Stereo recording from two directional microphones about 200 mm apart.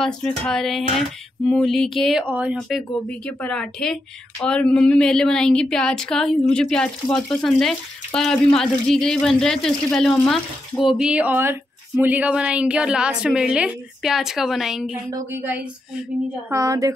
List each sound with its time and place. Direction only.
0.0 s a woman's voice: 5° left (ahead or behind)
2.5 s speech: 5° left (ahead or behind)
15.0 s a woman's voice: 15° right (ahead or behind)